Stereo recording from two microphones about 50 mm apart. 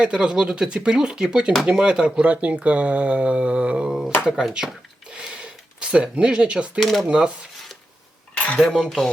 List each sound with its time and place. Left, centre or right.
0.0 s speech: centre
4.5 s a sound: centre
6.8 s cutlery: centre
7.1 s speech: centre
8.4 s cutlery: left
8.7 s cutlery: centre